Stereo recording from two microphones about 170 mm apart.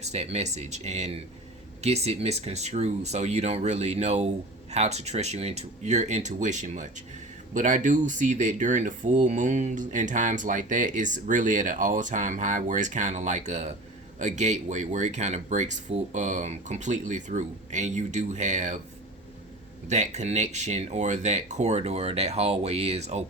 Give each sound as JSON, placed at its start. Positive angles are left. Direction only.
{"t": 0.0, "sound": "speech", "side_deg": -40}
{"t": 19.9, "sound": "speech", "side_deg": -45}